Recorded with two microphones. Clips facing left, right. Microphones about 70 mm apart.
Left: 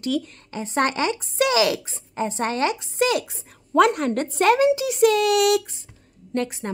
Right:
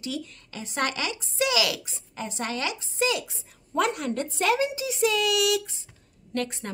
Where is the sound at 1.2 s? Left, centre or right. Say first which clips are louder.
Left 3 dB; left.